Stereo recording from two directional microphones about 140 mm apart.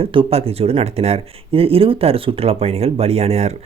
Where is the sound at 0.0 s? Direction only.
40° right (ahead or behind).